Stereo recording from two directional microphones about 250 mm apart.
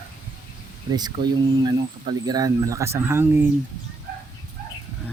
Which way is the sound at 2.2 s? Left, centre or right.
Centre.